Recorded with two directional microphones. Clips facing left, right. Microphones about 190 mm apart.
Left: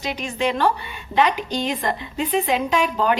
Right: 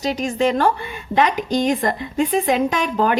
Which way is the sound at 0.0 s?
40° right (ahead or behind).